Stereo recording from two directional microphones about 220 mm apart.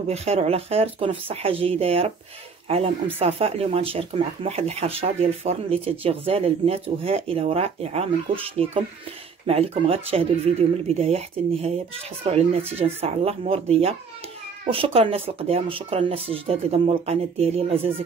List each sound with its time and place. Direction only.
0.1 s speech: 30° right (ahead or behind)
3.2 s speech: 25° right (ahead or behind)